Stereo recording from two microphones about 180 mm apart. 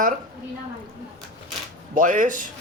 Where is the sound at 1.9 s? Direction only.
45° right (ahead or behind).